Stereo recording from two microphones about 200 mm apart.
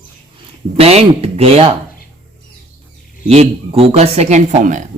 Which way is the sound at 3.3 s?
30° right (ahead or behind).